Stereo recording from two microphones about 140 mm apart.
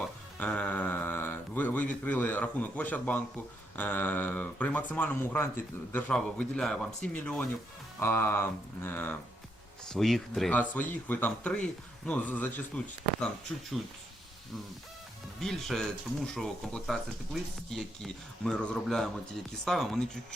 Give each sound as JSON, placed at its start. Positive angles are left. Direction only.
{"t": 0.3, "sound": "speech", "side_deg": 10}
{"t": 9.8, "sound": "speech", "side_deg": 5}
{"t": 15.4, "sound": "speech", "side_deg": 5}